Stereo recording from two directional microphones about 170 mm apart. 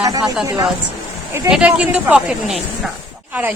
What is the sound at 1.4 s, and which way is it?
Speech, 5° right (ahead or behind).